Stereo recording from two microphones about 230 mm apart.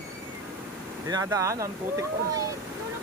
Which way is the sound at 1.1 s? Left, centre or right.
Centre.